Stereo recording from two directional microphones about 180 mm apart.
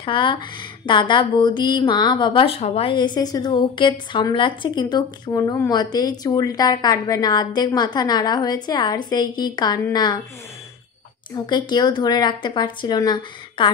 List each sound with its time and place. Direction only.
0.0 s a woman's voice: 25° left (ahead or behind)
11.3 s a woman's voice: 25° left (ahead or behind)